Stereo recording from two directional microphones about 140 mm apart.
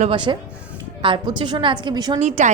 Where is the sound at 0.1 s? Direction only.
35° right (ahead or behind).